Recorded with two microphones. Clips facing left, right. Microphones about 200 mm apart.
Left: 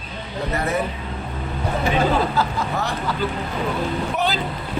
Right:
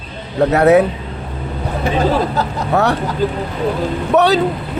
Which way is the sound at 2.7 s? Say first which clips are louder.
Right 15 dB; 75° right (ahead or behind).